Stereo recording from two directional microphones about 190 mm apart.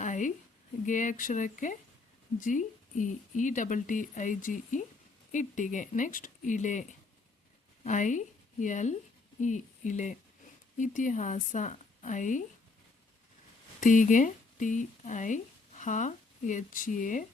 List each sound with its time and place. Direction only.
0.0 s a sound: 40° left (ahead or behind)
0.9 s speech: 40° left (ahead or behind)
7.9 s speech: 40° left (ahead or behind)
13.7 s speech: 40° left (ahead or behind)